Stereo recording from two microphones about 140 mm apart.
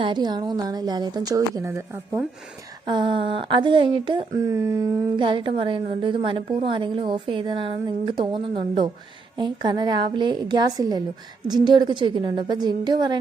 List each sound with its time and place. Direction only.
0.0 s a woman's voice: 30° right (ahead or behind)
2.8 s a woman's voice: 35° right (ahead or behind)
4.4 s a woman's voice: 20° right (ahead or behind)
5.1 s a woman's voice: 35° right (ahead or behind)